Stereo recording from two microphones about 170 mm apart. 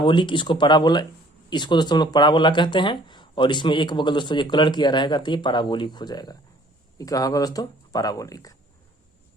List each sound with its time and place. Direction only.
0.0 s speech: 30° left (ahead or behind)